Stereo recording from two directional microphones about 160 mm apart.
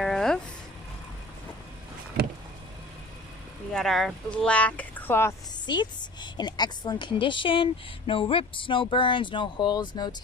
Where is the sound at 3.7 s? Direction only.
Centre (ahead or behind).